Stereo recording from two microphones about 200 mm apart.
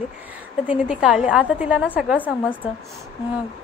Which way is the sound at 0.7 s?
5° right (ahead or behind).